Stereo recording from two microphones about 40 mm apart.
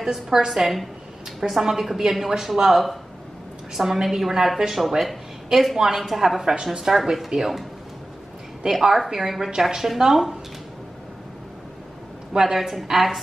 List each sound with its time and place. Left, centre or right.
0.0 s a woman's voice: centre
6.4 s a woman's voice: centre
8.7 s a woman's voice: centre
12.4 s a woman's voice: centre